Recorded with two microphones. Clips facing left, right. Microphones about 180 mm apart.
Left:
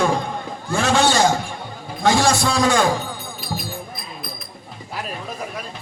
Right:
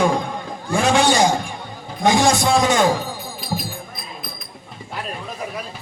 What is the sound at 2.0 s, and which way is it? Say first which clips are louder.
Speech: right 1 dB; 20° right (ahead or behind).